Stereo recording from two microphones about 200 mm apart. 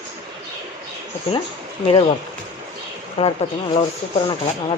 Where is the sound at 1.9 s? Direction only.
25° left (ahead or behind).